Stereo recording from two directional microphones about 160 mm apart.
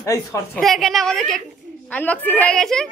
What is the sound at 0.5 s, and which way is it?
A woman's voice, centre (ahead or behind).